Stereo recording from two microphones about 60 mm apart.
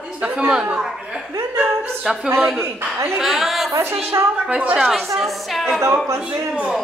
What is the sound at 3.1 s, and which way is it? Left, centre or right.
Speech, centre.